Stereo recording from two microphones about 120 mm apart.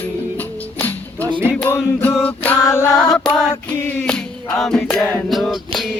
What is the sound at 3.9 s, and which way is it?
Music, 10° left (ahead or behind).